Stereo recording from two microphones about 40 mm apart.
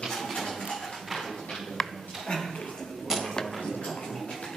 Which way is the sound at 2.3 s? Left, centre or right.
Left.